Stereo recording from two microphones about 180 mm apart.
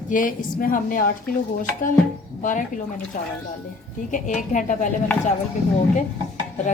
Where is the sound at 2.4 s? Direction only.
45° left (ahead or behind).